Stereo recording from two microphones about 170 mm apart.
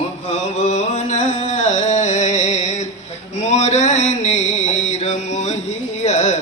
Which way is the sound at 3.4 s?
45° left (ahead or behind).